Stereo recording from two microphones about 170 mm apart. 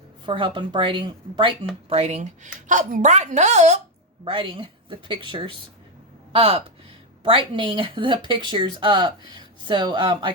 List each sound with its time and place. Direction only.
0.3 s a woman's voice: 30° right (ahead or behind)
4.2 s speech: 30° right (ahead or behind)